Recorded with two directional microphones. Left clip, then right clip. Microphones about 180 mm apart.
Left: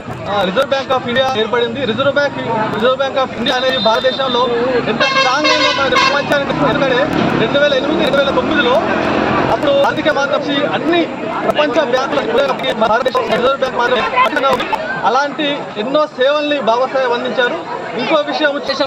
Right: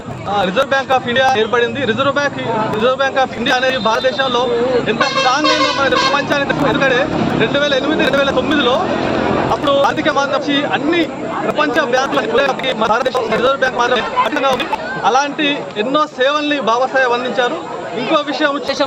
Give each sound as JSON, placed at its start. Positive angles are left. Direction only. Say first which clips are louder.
{"t": 0.7, "sound": "a man's voice", "louder": "right 1 dB", "side_deg": -25}
{"t": 6.7, "sound": "a man's voice", "louder": "even", "side_deg": -25}
{"t": 9.8, "sound": "a man's voice", "louder": "left 1 dB", "side_deg": -25}
{"t": 12.8, "sound": "a man's voice", "louder": "left 2 dB", "side_deg": -25}